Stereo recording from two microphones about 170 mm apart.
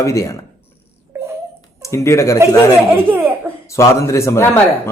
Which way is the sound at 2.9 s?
10° right (ahead or behind).